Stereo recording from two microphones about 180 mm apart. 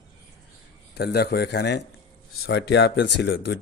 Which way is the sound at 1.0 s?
65° left (ahead or behind).